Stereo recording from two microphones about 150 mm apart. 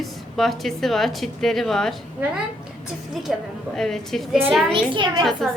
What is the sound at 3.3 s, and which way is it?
A woman's voice, centre (ahead or behind).